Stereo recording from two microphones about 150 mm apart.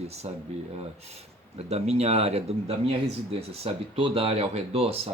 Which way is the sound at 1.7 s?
45° right (ahead or behind).